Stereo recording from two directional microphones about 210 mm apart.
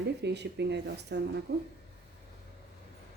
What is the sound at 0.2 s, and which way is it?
Speech, 55° right (ahead or behind).